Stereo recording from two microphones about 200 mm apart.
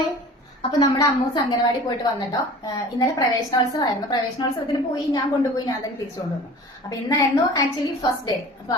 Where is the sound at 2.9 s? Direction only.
15° left (ahead or behind).